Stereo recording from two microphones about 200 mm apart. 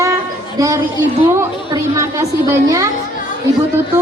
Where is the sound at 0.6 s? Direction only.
15° right (ahead or behind).